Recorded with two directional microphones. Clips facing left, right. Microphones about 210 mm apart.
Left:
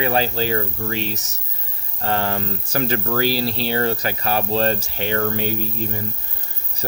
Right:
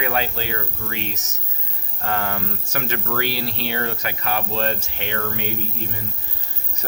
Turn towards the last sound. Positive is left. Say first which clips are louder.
# left 5 dB
turn(degrees=35)  # may be behind; listen again after turning